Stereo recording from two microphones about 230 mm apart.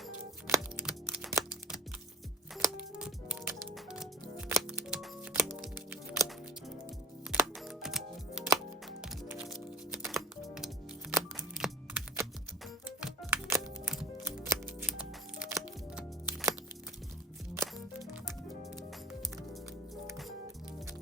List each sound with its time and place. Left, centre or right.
0.4 s computer keyboard: centre
2.6 s music: centre
7.3 s music: centre